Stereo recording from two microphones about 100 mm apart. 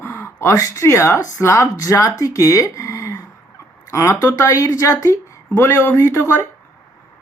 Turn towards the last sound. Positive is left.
turn(degrees=30)  # may be behind; listen again after turning